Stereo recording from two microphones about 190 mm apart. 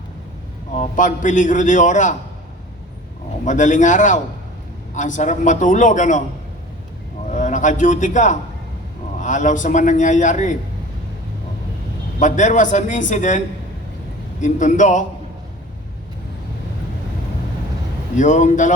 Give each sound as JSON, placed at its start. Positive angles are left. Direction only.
{"t": 0.8, "sound": "a man's voice", "side_deg": 40}
{"t": 3.4, "sound": "a man's voice", "side_deg": 40}
{"t": 7.3, "sound": "a man's voice", "side_deg": 40}
{"t": 12.2, "sound": "a man's voice", "side_deg": 40}
{"t": 14.4, "sound": "a man's voice", "side_deg": 40}
{"t": 18.2, "sound": "a man's voice", "side_deg": 40}